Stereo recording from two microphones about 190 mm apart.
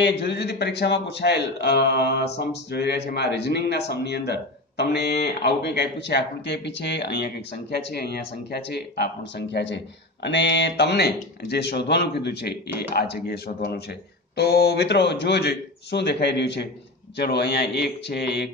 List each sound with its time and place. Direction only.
0.0 s speech: 65° left (ahead or behind)